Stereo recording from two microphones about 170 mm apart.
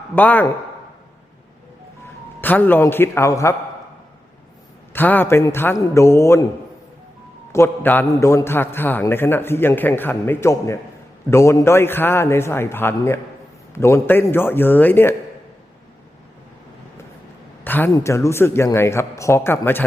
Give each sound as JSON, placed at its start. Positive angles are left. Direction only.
{"t": 0.2, "sound": "a man's voice", "side_deg": 10}
{"t": 2.4, "sound": "a man's voice", "side_deg": 10}
{"t": 4.9, "sound": "a man's voice", "side_deg": 10}
{"t": 7.5, "sound": "a man's voice", "side_deg": 15}
{"t": 17.6, "sound": "a man's voice", "side_deg": 10}